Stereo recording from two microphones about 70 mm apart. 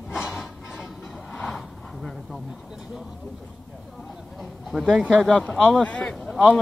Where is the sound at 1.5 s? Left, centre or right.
Centre.